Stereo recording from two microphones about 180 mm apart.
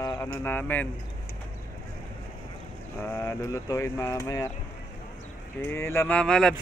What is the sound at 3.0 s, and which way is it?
Speech, 10° left (ahead or behind).